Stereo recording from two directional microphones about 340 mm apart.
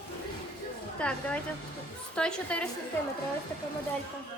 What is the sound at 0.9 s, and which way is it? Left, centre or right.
A woman's voice, centre.